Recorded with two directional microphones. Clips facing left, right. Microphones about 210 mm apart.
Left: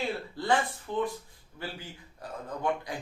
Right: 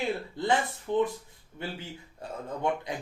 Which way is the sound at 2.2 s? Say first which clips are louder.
Right 1 dB; 25° right (ahead or behind).